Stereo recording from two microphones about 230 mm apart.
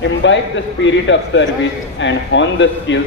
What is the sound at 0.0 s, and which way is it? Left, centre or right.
A man's voice, left.